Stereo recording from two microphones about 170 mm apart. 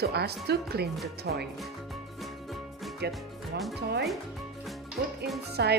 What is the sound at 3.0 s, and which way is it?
A woman's voice, 75° right (ahead or behind).